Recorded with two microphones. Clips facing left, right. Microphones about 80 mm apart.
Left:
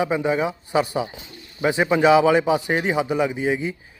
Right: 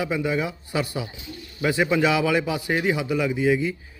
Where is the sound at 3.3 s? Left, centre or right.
Left.